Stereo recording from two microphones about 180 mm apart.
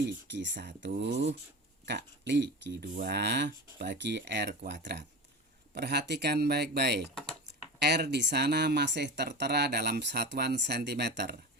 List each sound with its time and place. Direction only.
0.3 s speech: 80° right
0.9 s speech: 70° right (ahead or behind)
7.1 s speech: 5° left (ahead or behind)
7.8 s speech: 65° right (ahead or behind)